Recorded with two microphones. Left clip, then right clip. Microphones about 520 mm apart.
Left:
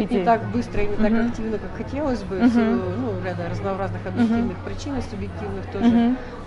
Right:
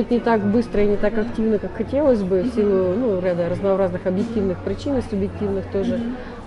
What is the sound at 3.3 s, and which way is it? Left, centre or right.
Speech, right.